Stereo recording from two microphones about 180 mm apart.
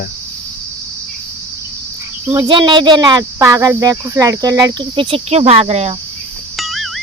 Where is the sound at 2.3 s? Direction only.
25° right (ahead or behind).